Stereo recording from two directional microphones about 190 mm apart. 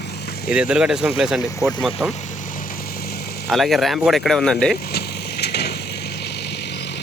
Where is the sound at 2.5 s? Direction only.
45° left (ahead or behind).